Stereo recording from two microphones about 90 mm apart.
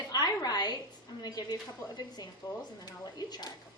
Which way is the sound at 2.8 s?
45° left (ahead or behind).